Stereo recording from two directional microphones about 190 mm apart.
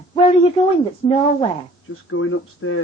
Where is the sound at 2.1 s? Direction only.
90° left.